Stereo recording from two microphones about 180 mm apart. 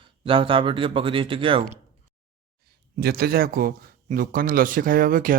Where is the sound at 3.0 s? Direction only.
60° right (ahead or behind).